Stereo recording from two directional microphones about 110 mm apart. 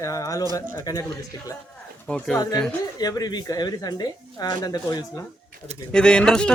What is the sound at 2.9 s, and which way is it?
Speech, 35° left (ahead or behind).